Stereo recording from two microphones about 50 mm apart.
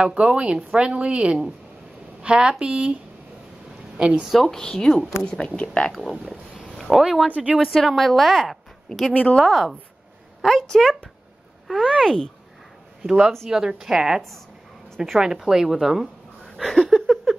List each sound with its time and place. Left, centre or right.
0.0 s a woman's voice: right
4.3 s speech: centre
6.8 s speech: centre
7.2 s a woman's voice: right
7.5 s a woman's voice: centre
13.5 s speech: centre
16.5 s a sound: centre
17.1 s a sound: centre